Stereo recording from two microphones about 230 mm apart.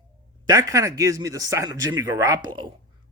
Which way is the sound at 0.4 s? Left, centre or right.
Centre.